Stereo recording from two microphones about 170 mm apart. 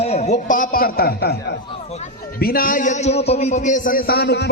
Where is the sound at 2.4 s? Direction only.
60° left (ahead or behind); by 4.5 s 85° left.